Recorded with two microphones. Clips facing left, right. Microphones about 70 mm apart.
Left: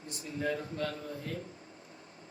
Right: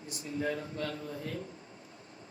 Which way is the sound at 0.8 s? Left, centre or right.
Left.